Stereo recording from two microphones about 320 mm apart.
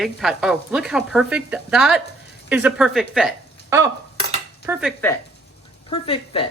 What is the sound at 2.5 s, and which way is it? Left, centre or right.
Dishes, centre.